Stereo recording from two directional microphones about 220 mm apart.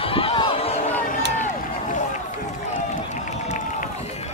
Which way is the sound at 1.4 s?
35° left (ahead or behind).